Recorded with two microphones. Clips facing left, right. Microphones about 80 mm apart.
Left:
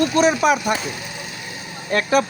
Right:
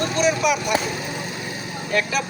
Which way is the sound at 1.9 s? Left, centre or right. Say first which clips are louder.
Left 5 dB; left.